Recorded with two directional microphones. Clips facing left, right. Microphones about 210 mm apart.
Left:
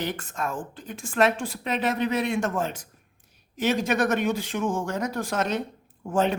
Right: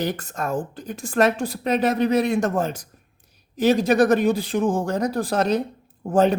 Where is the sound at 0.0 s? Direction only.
40° right (ahead or behind).